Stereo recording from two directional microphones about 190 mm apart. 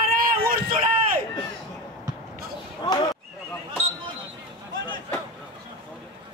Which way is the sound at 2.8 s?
20° left (ahead or behind).